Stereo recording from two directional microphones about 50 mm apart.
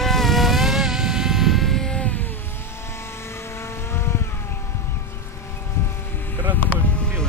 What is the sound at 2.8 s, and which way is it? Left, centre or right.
Vehicle, left.